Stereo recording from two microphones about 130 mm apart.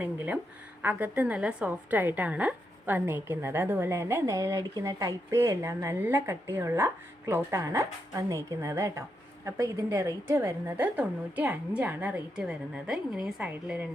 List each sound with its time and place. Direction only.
0.8 s a woman's voice: 15° right (ahead or behind)